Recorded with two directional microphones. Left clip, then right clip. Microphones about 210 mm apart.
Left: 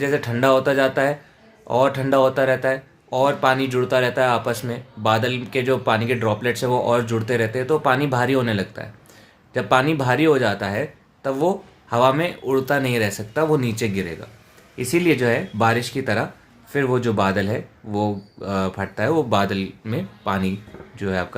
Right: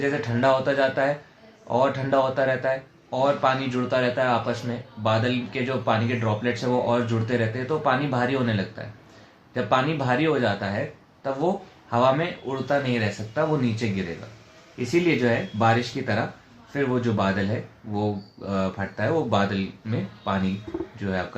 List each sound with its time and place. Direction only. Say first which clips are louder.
0.0 s speech: left 3 dB; 55° left (ahead or behind)